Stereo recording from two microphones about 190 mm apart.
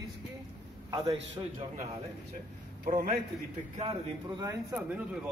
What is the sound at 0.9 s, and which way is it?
Speech, 30° right (ahead or behind).